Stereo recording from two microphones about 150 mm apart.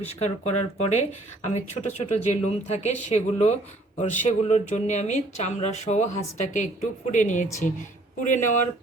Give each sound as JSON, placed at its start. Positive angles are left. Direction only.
{"t": 0.0, "sound": "speech", "side_deg": 45}